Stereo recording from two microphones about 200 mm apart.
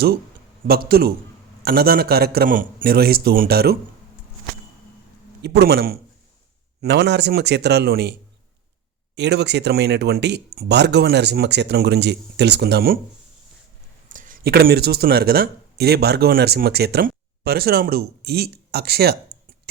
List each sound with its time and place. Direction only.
0.9 s a man's voice: 50° right (ahead or behind)
5.4 s a man's voice: 55° right (ahead or behind)
9.1 s speech: 55° right (ahead or behind)
14.1 s speech: 40° right (ahead or behind)